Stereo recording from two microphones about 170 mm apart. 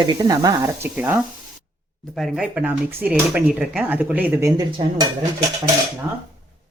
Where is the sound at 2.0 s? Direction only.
Centre (ahead or behind); by 4.7 s 15° right (ahead or behind).